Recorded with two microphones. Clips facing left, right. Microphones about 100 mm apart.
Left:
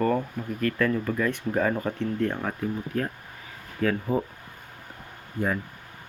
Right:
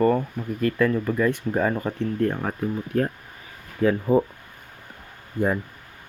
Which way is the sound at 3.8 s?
20° right (ahead or behind).